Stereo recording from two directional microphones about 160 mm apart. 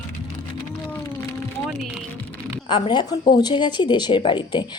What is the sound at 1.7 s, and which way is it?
Speech, 5° right (ahead or behind).